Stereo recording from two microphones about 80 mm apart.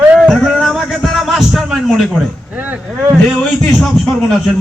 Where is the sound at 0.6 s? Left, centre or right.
Centre.